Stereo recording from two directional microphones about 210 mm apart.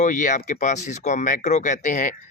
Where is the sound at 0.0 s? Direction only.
35° left (ahead or behind).